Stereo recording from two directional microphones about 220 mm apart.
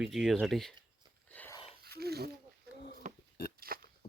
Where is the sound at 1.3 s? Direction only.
10° left (ahead or behind).